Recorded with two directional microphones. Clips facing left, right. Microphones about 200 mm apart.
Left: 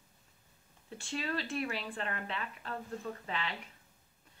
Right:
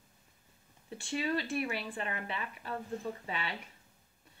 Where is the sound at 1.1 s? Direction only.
10° right (ahead or behind).